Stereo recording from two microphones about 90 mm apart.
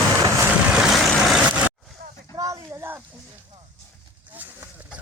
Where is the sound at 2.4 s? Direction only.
35° right (ahead or behind).